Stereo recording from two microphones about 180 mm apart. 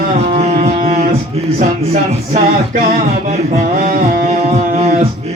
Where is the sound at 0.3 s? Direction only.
35° right (ahead or behind).